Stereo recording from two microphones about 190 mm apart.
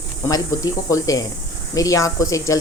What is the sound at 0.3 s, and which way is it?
Speech, 20° left (ahead or behind).